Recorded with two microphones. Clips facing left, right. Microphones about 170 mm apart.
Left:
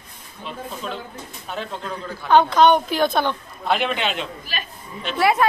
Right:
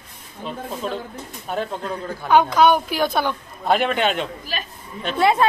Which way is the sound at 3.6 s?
45° right (ahead or behind).